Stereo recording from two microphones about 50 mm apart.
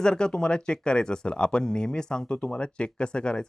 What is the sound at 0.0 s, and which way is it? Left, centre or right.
Speech, centre.